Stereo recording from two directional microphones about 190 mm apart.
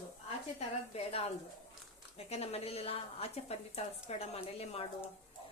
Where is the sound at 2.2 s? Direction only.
35° left (ahead or behind).